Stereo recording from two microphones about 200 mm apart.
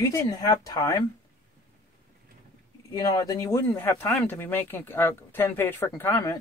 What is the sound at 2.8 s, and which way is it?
Speech, 15° left (ahead or behind).